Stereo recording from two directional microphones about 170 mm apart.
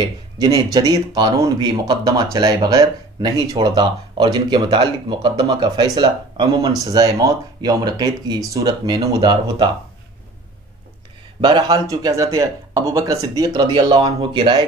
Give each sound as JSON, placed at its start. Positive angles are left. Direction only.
{"t": 0.0, "sound": "speech", "side_deg": -25}
{"t": 11.4, "sound": "speech", "side_deg": -25}